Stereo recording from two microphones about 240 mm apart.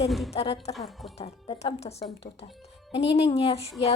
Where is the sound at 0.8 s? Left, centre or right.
Centre.